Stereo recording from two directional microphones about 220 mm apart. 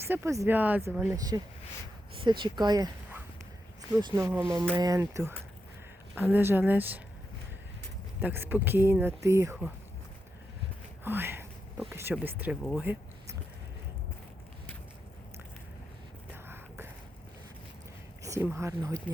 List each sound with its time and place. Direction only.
0.0 s speech: 10° right (ahead or behind)
8.2 s speech: 10° right (ahead or behind)
11.0 s speech: 10° right (ahead or behind)
16.5 s a sound: 10° right (ahead or behind)
18.2 s speech: 15° right (ahead or behind)